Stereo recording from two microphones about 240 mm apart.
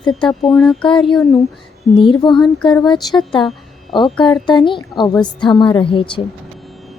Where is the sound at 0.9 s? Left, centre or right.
Left.